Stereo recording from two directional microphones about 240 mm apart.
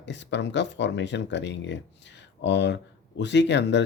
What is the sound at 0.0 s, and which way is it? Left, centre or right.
Speech, left.